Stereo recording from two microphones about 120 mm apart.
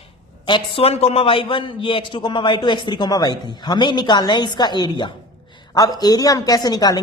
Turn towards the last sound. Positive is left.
turn(degrees=35)  # may be behind; listen again after turning